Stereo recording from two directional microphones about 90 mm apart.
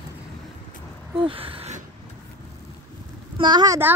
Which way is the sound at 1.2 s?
90° right.